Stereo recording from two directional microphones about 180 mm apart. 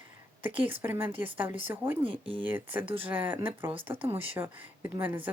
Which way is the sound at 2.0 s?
30° right (ahead or behind).